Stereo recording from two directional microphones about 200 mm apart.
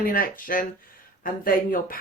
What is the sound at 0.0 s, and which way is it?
Speech, 45° left (ahead or behind).